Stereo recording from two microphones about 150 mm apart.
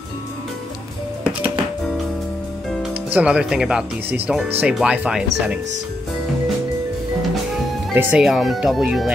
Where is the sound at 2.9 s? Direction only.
10° right (ahead or behind).